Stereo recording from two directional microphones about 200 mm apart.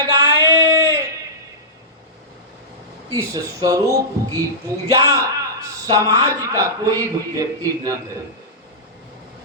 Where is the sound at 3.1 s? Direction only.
15° right (ahead or behind).